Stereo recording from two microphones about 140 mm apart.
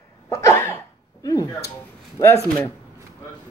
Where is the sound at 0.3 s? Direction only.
20° left (ahead or behind).